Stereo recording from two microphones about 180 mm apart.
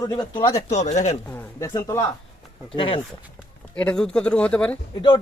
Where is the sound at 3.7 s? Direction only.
5° left (ahead or behind).